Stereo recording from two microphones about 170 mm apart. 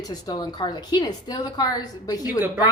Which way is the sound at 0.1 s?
20° left (ahead or behind).